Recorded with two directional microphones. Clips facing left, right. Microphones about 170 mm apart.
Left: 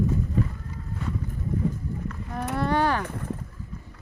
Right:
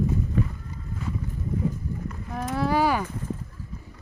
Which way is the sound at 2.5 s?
5° right (ahead or behind).